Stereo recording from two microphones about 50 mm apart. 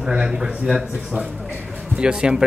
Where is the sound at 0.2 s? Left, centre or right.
Centre.